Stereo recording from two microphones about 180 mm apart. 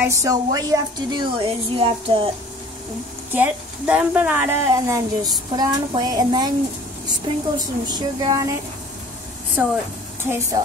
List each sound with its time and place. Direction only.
0.1 s a woman's voice: 20° right (ahead or behind)
3.3 s a woman's voice: 10° right (ahead or behind)
9.6 s a woman's voice: 10° right (ahead or behind)